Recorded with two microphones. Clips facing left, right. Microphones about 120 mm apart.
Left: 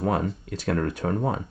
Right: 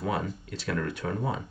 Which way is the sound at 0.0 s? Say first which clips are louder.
Left 5 dB; 50° left (ahead or behind).